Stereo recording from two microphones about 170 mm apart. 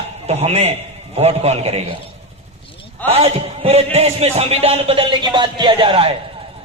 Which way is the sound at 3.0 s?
35° right (ahead or behind).